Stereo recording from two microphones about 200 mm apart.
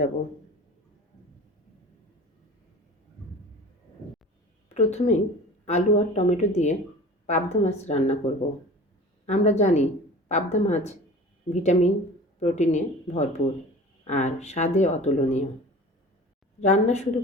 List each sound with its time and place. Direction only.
4.7 s speech: 35° left (ahead or behind)
9.2 s speech: 35° left (ahead or behind)
16.6 s speech: 35° left (ahead or behind)